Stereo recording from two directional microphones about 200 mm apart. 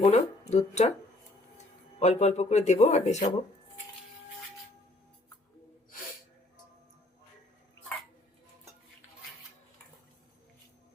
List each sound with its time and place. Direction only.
0.0 s speech: 35° left (ahead or behind)